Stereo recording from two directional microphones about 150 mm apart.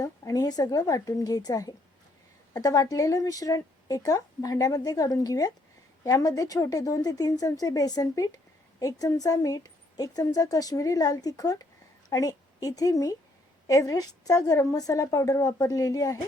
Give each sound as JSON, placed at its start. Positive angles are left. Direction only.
{"t": 0.0, "sound": "a woman's voice", "side_deg": 25}